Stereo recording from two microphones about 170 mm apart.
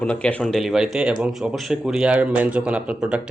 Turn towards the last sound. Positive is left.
turn(degrees=-5)  # may be behind; listen again after turning